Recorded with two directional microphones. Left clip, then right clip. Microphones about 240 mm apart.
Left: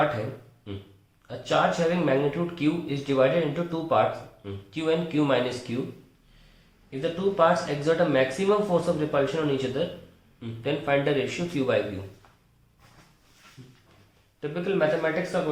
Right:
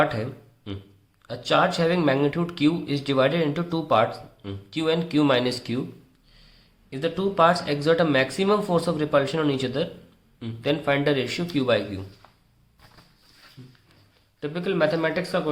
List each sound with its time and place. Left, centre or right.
1.3 s speech: right
7.0 s speech: right
14.4 s speech: right